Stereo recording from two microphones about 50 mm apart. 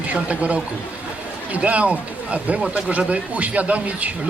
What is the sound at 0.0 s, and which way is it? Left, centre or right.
Speech, right.